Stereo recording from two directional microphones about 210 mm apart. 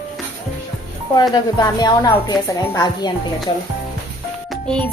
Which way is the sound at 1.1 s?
20° left (ahead or behind).